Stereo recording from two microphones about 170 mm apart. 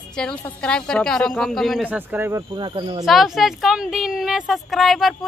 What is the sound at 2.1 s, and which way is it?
Speech, 15° right (ahead or behind).